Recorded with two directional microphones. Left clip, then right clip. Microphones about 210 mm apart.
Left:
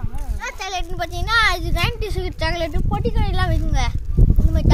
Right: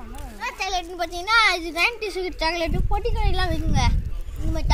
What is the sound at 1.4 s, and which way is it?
Speech, 15° left (ahead or behind).